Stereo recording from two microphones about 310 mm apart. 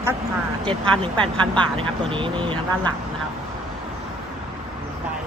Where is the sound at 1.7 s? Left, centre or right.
Centre.